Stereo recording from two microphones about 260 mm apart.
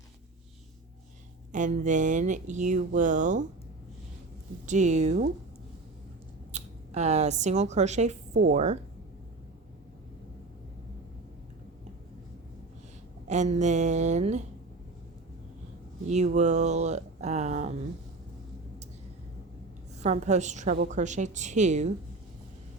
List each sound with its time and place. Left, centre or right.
1.5 s speech: right
4.6 s speech: right
6.5 s a woman's voice: right
13.2 s speech: right
16.0 s speech: right
20.0 s speech: right